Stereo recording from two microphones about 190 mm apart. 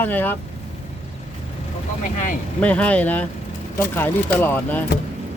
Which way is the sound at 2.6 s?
5° left (ahead or behind).